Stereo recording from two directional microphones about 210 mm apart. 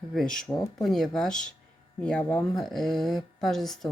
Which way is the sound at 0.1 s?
Centre (ahead or behind).